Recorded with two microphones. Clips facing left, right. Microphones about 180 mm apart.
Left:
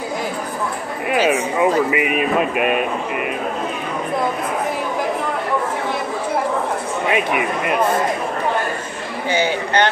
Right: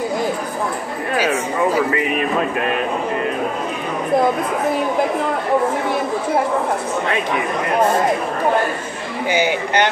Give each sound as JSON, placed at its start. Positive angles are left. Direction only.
{"t": 1.1, "sound": "a sound", "side_deg": 15}
{"t": 1.9, "sound": "speech", "side_deg": 15}
{"t": 7.1, "sound": "speech", "side_deg": 15}
{"t": 9.3, "sound": "speech", "side_deg": -10}